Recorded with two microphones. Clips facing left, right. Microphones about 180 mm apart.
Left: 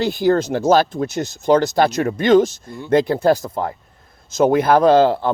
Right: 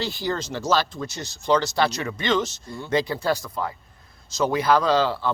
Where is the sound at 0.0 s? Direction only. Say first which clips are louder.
Left 11 dB; 50° left (ahead or behind).